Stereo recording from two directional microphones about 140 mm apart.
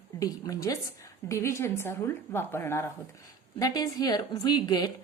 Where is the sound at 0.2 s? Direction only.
25° left (ahead or behind).